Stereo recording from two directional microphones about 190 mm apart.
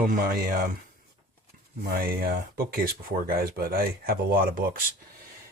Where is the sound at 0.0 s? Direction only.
50° right (ahead or behind).